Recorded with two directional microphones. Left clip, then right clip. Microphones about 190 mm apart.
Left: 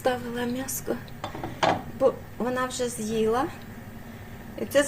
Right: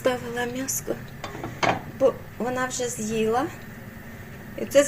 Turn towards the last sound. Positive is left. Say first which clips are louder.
# right 4 dB
turn(degrees=-10)  # may be behind; listen again after turning